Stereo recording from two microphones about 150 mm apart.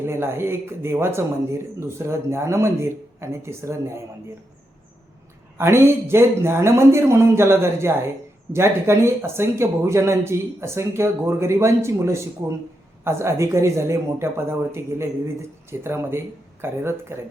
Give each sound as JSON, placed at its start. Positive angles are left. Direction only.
{"t": 0.0, "sound": "speech", "side_deg": -15}
{"t": 5.5, "sound": "speech", "side_deg": -15}